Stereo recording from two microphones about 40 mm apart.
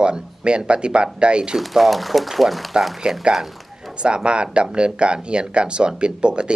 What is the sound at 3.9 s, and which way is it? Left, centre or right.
Speech, right.